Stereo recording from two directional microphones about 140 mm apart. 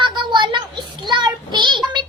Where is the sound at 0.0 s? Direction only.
35° right (ahead or behind).